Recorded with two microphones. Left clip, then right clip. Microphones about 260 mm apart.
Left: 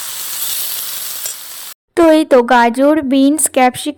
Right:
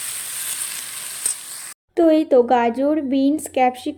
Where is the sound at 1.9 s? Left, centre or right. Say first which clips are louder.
Left 6 dB; left.